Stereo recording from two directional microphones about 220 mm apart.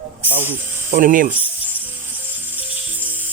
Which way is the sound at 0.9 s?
35° right (ahead or behind).